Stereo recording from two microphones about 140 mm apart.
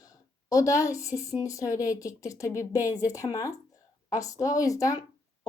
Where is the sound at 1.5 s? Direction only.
25° left (ahead or behind).